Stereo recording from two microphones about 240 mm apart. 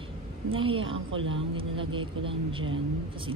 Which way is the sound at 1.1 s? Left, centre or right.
Right.